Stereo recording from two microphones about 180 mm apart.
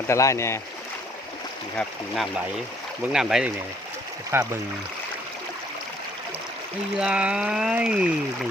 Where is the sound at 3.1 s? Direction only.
5° right (ahead or behind).